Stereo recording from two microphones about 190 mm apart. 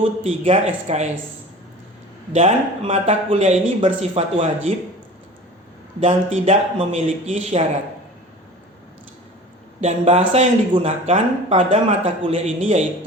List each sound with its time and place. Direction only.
0.2 s speech: 30° right (ahead or behind)
2.3 s speech: 30° right (ahead or behind)
6.0 s speech: 30° right (ahead or behind)
9.8 s speech: 35° right (ahead or behind)